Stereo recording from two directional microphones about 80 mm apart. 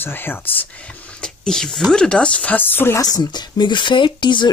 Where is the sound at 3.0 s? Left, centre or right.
Left.